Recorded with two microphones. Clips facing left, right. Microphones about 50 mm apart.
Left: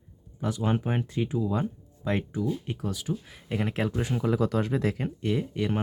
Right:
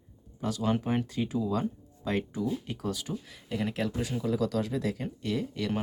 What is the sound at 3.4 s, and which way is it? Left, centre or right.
Speech, left.